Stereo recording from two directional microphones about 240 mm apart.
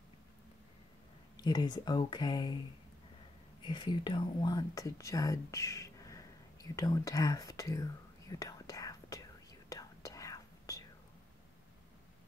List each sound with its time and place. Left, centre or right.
1.3 s speech: centre
3.6 s whispering: centre